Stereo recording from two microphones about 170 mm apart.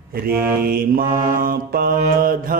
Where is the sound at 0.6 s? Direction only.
60° right (ahead or behind).